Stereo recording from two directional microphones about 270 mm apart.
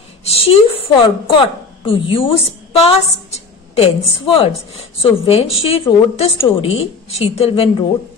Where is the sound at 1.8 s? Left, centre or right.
Centre.